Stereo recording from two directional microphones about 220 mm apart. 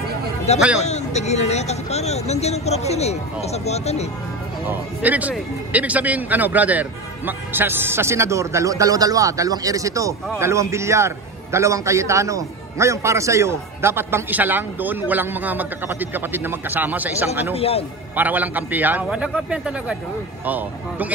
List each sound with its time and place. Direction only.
0.7 s speech: 30° left (ahead or behind)
4.6 s a man's voice: 5° right (ahead or behind)
17.6 s speech: 25° left (ahead or behind)
18.1 s a man's voice: 10° right (ahead or behind)